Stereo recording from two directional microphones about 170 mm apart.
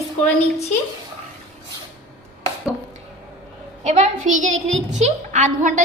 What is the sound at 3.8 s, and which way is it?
A woman's voice, 40° right (ahead or behind).